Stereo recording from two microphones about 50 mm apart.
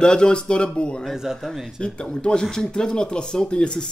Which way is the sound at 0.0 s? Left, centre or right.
Centre.